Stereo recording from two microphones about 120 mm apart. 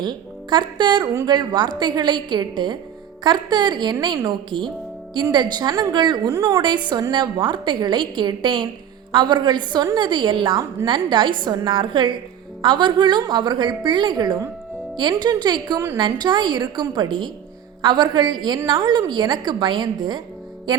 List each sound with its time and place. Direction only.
0.0 s a woman's voice: 40° right (ahead or behind)
1.0 s a woman's voice: 25° right (ahead or behind)
1.3 s a woman's voice: 40° right (ahead or behind)